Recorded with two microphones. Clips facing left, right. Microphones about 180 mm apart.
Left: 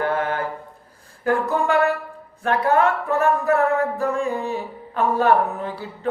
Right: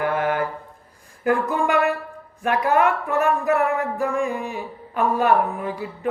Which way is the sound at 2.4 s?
15° right (ahead or behind).